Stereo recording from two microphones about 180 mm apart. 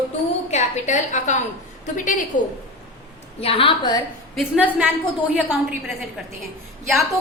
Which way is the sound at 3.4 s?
30° left (ahead or behind).